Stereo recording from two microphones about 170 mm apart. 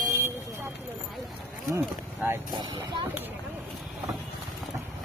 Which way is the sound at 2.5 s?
25° right (ahead or behind).